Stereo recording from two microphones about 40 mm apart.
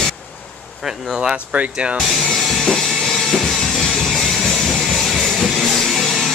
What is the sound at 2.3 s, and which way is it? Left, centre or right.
Drum kit, centre.